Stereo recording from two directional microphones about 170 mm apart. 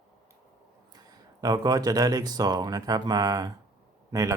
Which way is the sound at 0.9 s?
20° right (ahead or behind).